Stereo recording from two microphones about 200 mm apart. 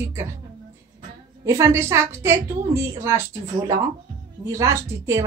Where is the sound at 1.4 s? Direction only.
15° right (ahead or behind).